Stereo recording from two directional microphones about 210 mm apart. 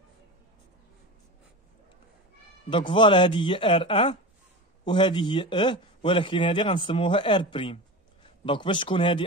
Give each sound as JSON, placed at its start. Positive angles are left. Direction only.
{"t": 2.7, "sound": "a man's voice", "side_deg": 25}